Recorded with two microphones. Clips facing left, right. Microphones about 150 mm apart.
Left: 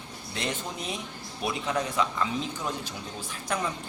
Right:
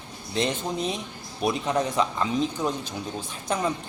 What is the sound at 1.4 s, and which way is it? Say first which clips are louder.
Speech: right 5 dB; 20° right (ahead or behind).